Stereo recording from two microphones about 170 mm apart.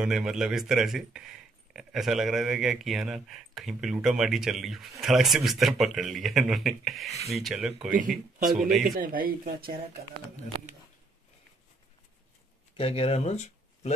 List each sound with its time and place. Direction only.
0.0 s speech: 5° right (ahead or behind)
8.9 s speech: 55° right (ahead or behind)
12.7 s speech: 35° left (ahead or behind)